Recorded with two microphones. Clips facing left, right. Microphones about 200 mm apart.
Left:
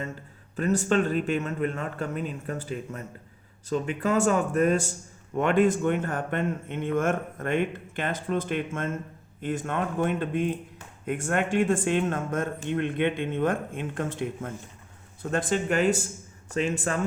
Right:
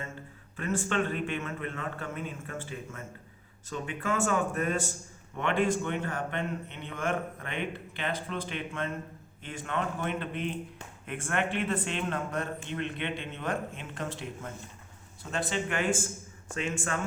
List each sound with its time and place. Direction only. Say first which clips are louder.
0.5 s a man's voice: left 7 dB; 40° left (ahead or behind)